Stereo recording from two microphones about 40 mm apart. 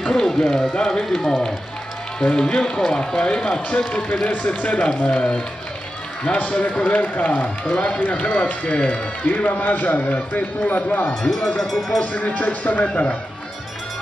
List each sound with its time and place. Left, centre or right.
0.0 s speech: centre
3.7 s a man's voice: left
8.0 s a man's voice: left
9.6 s speech: left
11.2 s speech: centre
12.0 s a man's voice: left